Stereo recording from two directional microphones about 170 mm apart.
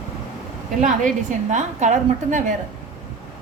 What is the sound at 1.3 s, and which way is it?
A woman's voice, 45° right (ahead or behind).